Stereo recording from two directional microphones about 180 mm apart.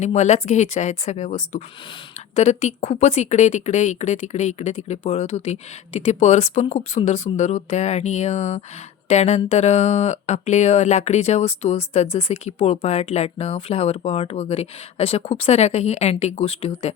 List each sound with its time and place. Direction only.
0.0 s speech: 40° left (ahead or behind)